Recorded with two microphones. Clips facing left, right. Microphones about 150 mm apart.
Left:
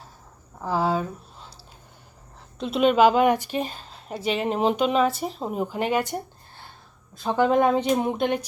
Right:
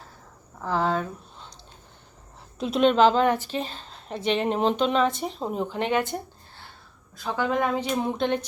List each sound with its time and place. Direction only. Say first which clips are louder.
0.6 s speech: left 1 dB; 10° left (ahead or behind)
2.6 s a woman's voice: left 1 dB; centre (ahead or behind)
7.2 s a woman's voice: left 5 dB; 25° left (ahead or behind)